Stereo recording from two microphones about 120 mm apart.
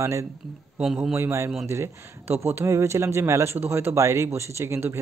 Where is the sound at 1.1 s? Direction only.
20° right (ahead or behind).